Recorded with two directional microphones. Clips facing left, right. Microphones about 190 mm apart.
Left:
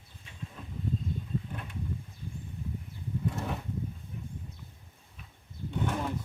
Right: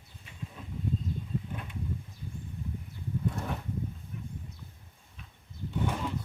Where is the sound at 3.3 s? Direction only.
Centre (ahead or behind).